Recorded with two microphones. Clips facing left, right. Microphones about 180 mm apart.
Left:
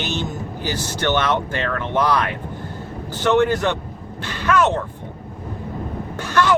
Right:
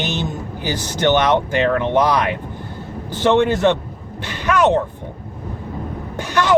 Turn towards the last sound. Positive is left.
turn(degrees=-15)  # may be behind; listen again after turning